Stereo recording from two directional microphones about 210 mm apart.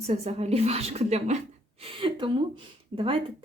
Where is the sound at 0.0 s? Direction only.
30° right (ahead or behind).